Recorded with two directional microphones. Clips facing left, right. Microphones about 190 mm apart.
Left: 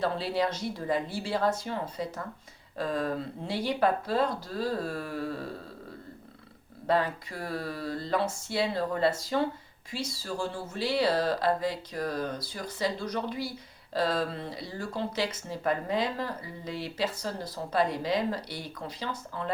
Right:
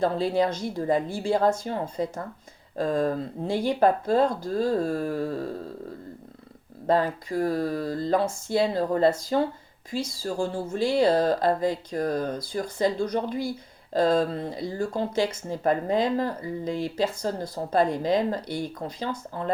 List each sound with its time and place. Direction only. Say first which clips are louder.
0.0 s speech: right 5 dB; 45° right (ahead or behind)
6.8 s speech: right 4 dB; 45° right (ahead or behind)